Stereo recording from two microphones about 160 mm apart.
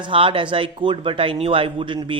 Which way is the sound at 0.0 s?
30° right (ahead or behind).